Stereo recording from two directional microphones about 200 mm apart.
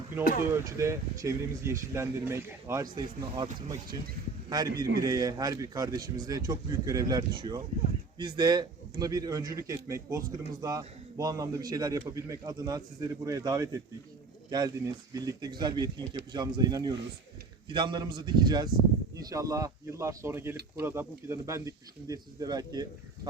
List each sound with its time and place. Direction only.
0.6 s a man's voice: 15° right (ahead or behind)
15.1 s a man's voice: 20° right (ahead or behind)